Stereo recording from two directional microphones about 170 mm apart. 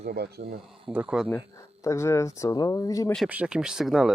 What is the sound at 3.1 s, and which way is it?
Speech, 5° right (ahead or behind).